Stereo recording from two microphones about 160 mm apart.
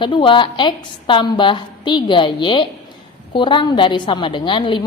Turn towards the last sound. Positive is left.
turn(degrees=30)  # may be behind; listen again after turning